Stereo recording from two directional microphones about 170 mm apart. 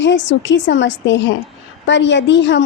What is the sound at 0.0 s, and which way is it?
A woman's voice, 90° left.